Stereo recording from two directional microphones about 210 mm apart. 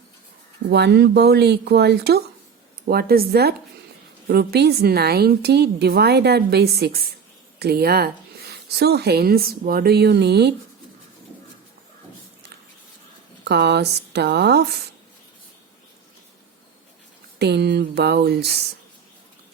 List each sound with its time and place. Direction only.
0.7 s speech: 50° right (ahead or behind)
13.4 s speech: 50° right (ahead or behind)
17.4 s speech: 50° right (ahead or behind)